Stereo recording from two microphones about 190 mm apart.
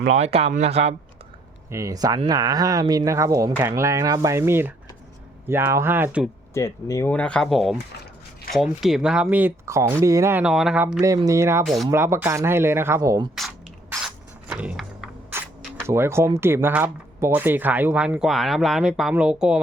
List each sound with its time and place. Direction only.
0.1 s speech: 35° right (ahead or behind)
1.7 s speech: 15° right (ahead or behind)
6.5 s speech: 15° left (ahead or behind)
7.1 s speech: 5° left (ahead or behind); by 10.4 s 15° right (ahead or behind)
10.4 s speech: centre (ahead or behind)
11.0 s speech: 20° right (ahead or behind)
11.6 s speech: centre (ahead or behind)
11.9 s speech: 15° right (ahead or behind)
13.9 s a sound: 5° right (ahead or behind)